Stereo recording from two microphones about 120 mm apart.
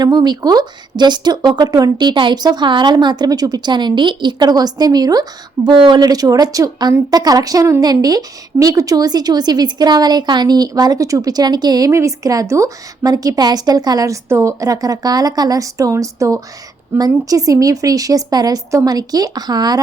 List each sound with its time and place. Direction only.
0.0 s a woman's voice: 35° right (ahead or behind)